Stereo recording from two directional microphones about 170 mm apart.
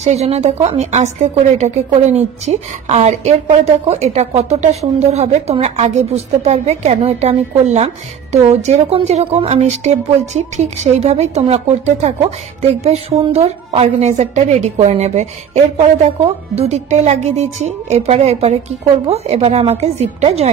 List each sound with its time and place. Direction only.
0.0 s a woman's voice: 40° right (ahead or behind)